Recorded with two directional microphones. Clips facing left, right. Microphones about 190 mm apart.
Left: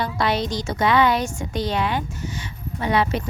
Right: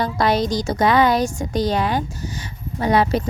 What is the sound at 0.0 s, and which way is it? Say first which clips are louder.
A woman's voice: right 4 dB; 40° right (ahead or behind).